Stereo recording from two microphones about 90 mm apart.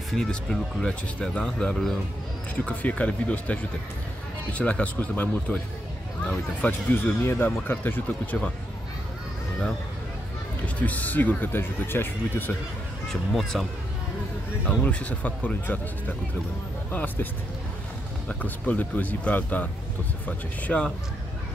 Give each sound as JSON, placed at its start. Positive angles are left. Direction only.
{"t": 0.1, "sound": "speech", "side_deg": 5}
{"t": 10.8, "sound": "speech", "side_deg": 15}
{"t": 13.1, "sound": "speech", "side_deg": 0}
{"t": 14.9, "sound": "speech", "side_deg": 15}
{"t": 16.9, "sound": "speech", "side_deg": 20}
{"t": 18.3, "sound": "speech", "side_deg": 15}